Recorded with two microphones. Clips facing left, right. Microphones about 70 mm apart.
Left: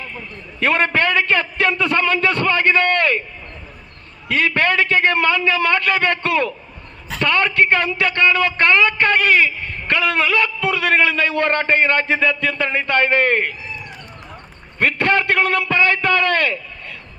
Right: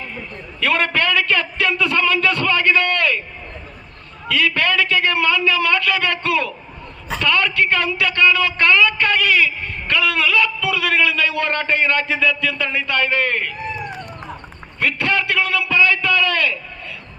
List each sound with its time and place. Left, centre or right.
0.6 s a man's voice: left
4.3 s a man's voice: left
13.5 s a sound: right
14.8 s a man's voice: left